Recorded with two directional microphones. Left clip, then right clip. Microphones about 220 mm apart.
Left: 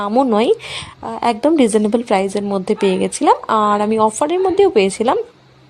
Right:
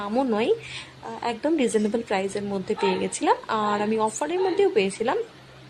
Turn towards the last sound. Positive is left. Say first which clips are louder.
# left 9 dB
turn(degrees=30)  # may be behind; listen again after turning